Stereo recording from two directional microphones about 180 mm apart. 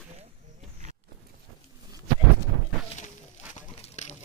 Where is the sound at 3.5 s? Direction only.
40° left (ahead or behind).